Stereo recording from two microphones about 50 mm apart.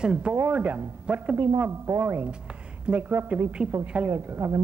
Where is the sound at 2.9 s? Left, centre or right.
Centre.